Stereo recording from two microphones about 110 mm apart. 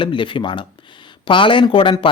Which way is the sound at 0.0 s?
50° left (ahead or behind).